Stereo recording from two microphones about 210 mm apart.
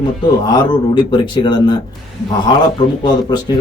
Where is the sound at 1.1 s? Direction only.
20° left (ahead or behind).